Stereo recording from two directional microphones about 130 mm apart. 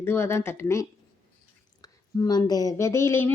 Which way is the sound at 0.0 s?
20° left (ahead or behind).